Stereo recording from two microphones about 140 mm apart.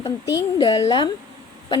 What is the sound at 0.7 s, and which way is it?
Speech, 45° left (ahead or behind).